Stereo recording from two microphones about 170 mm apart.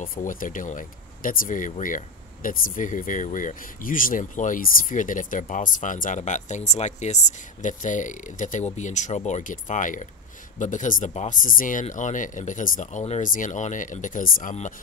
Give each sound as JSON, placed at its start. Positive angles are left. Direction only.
{"t": 0.0, "sound": "speech", "side_deg": 50}